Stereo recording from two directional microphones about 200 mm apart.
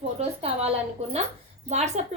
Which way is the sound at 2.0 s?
35° right (ahead or behind).